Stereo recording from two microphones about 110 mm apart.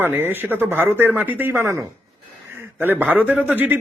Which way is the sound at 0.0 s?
20° right (ahead or behind).